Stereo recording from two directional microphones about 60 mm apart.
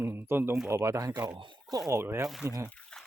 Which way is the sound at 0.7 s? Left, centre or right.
Right.